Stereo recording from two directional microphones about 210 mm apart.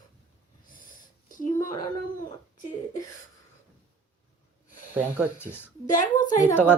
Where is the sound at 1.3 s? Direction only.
40° left (ahead or behind).